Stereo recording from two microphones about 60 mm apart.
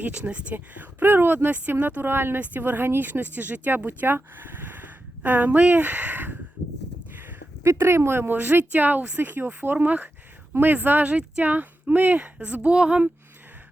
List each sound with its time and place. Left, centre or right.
0.0 s speech: right
7.1 s a sound: right
7.6 s speech: right
8.4 s speech: right
11.1 s speech: centre